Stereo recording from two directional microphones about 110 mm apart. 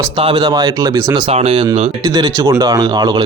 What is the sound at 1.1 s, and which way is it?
Speech, 60° right (ahead or behind).